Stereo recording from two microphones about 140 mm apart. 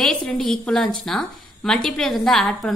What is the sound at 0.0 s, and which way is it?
A woman's voice, 5° left (ahead or behind).